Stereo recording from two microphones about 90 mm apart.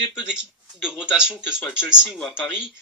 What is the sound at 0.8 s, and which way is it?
Speech, 10° right (ahead or behind).